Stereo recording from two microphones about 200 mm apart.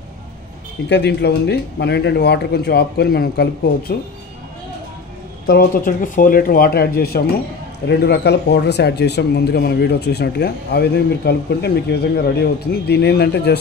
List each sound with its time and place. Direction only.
0.8 s speech: 55° left (ahead or behind)
5.5 s speech: 45° left (ahead or behind)